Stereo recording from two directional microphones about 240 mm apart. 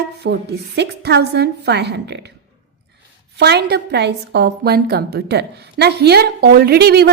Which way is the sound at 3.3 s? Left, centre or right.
Right.